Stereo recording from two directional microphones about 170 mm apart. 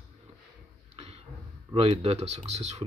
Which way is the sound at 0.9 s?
35° right (ahead or behind).